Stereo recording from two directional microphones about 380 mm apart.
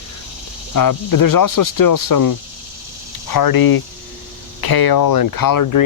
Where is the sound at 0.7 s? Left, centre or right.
Left.